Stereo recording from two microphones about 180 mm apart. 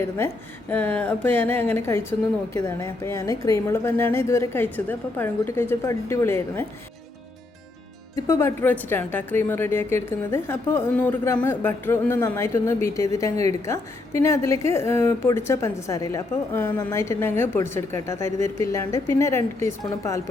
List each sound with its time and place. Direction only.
0.7 s a woman's voice: 10° left (ahead or behind)
8.1 s a woman's voice: 15° left (ahead or behind)